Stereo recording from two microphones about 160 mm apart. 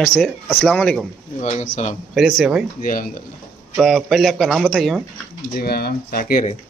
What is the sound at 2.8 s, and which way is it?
Speech, 60° left (ahead or behind).